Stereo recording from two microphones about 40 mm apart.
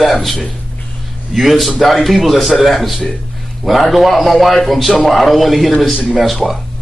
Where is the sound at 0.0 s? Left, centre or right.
Centre.